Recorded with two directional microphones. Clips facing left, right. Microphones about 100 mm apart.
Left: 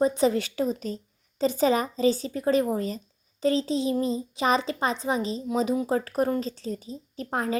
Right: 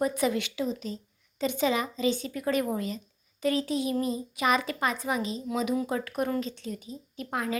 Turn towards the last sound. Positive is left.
turn(degrees=35)  # may be behind; listen again after turning